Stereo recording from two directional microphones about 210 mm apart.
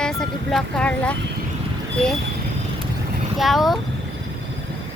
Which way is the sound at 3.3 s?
Centre (ahead or behind).